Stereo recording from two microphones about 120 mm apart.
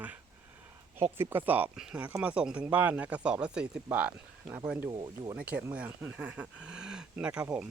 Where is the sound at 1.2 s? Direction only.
15° right (ahead or behind).